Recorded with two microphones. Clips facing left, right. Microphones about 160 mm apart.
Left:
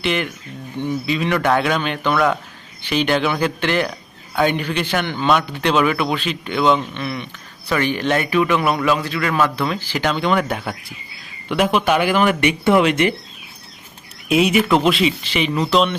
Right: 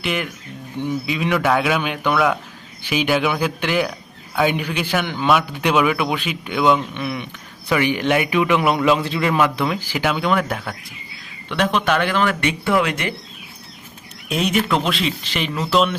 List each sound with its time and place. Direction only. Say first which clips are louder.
0.0 s a man's voice: left 3 dB; 5° right (ahead or behind); by 13.1 s 20° left (ahead or behind)
14.3 s speech: left 4 dB; 5° left (ahead or behind)